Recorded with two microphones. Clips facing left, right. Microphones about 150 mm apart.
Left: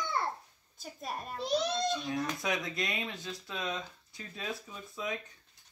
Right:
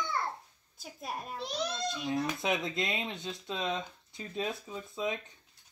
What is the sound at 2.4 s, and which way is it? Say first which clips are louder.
Speech: right 2 dB; 25° right (ahead or behind).